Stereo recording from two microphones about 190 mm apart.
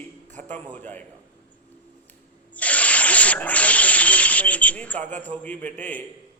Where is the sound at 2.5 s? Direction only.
5° left (ahead or behind).